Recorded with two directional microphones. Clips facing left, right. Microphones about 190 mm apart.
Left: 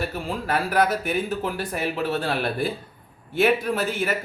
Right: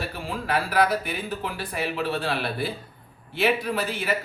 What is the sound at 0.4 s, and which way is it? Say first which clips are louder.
A man's voice: left 1 dB; 45° left (ahead or behind).